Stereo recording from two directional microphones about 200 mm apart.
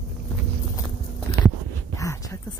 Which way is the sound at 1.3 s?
20° left (ahead or behind).